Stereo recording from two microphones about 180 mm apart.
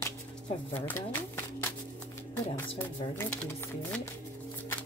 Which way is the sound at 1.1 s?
10° left (ahead or behind).